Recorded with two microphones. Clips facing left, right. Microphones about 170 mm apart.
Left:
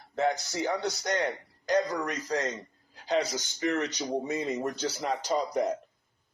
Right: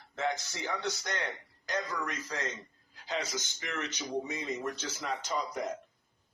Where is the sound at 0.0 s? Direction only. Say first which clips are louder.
Left 6 dB; 35° left (ahead or behind).